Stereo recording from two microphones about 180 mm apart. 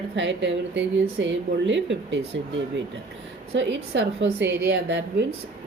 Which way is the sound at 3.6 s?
80° right.